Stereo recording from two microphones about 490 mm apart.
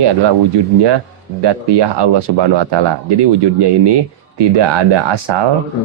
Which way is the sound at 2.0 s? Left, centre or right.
Right.